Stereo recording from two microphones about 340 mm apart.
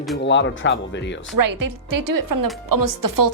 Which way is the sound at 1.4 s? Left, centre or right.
Right.